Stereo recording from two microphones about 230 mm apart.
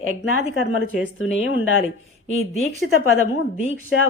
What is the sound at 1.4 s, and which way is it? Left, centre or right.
Speech, left.